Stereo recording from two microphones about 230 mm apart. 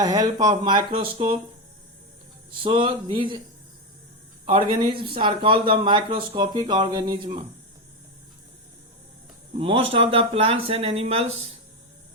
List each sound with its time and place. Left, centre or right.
0.0 s speech: centre
2.6 s speech: right
4.4 s speech: right
9.6 s speech: right